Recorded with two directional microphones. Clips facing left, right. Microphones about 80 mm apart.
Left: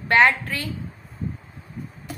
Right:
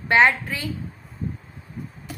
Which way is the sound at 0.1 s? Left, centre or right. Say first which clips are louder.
Even; centre.